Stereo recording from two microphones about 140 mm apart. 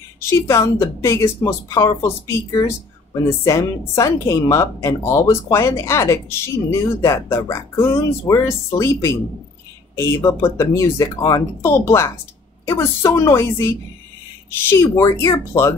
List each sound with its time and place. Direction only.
0.3 s speech: 20° left (ahead or behind)